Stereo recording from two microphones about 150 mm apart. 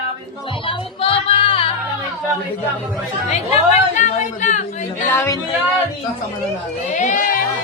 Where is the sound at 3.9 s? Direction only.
50° left (ahead or behind).